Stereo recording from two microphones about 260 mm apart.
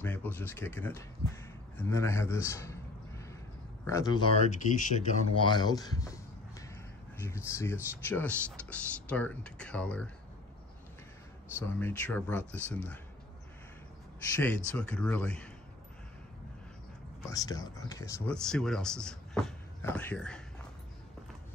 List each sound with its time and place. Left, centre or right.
0.0 s speech: centre
3.8 s speech: centre
5.5 s a sound: centre
8.1 s speech: centre
11.6 s speech: centre
14.3 s speech: centre
17.3 s speech: centre